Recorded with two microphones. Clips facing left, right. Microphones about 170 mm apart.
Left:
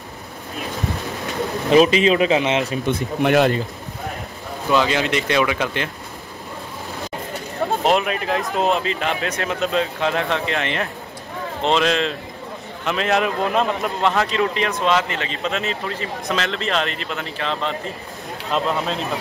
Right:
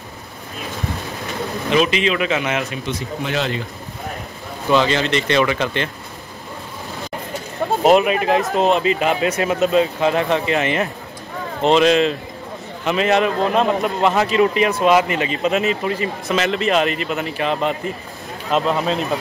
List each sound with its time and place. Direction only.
1.7 s a man's voice: 35° left (ahead or behind)
2.8 s speech: 55° left (ahead or behind)
4.6 s speech: 5° left (ahead or behind)
7.8 s a man's voice: 5° right (ahead or behind)